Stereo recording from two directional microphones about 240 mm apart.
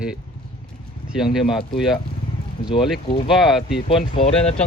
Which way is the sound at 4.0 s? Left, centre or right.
Left.